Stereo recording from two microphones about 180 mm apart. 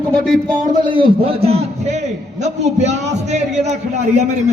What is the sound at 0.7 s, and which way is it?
A man's voice, 30° right (ahead or behind).